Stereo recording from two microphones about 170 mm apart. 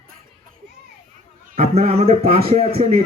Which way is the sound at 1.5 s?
40° right (ahead or behind).